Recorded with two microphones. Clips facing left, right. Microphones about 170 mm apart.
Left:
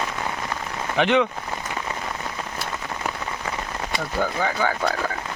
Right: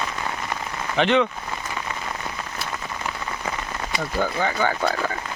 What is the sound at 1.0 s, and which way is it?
Speech, 15° left (ahead or behind).